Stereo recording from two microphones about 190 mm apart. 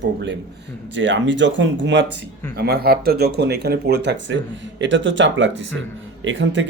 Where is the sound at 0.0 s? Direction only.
65° right (ahead or behind).